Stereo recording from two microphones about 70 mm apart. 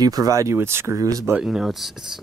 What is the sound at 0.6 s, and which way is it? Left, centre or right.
Speech, right.